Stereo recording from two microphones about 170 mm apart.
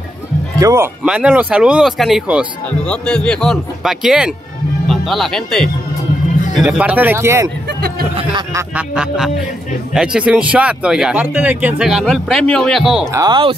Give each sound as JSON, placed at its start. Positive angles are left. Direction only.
{"t": 0.6, "sound": "speech", "side_deg": -20}
{"t": 1.0, "sound": "speech", "side_deg": -5}
{"t": 8.5, "sound": "speech", "side_deg": -5}
{"t": 13.1, "sound": "speech", "side_deg": -25}